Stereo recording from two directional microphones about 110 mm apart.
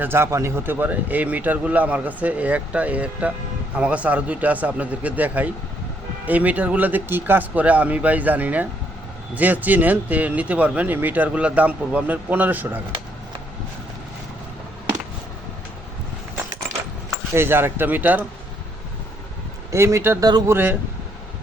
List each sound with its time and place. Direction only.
0.0 s speech: 20° right (ahead or behind)
17.3 s speech: 20° right (ahead or behind)
19.7 s speech: 25° right (ahead or behind)